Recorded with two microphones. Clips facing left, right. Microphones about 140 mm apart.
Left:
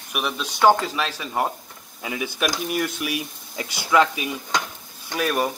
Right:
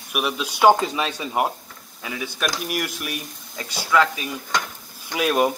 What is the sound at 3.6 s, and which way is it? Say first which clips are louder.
Speech: left 1 dB; 15° left (ahead or behind).